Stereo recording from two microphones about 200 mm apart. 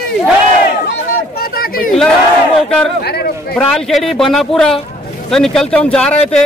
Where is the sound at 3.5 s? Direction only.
Centre (ahead or behind).